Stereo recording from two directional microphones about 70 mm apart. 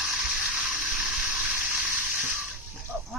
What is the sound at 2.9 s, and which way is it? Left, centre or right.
Snake, centre.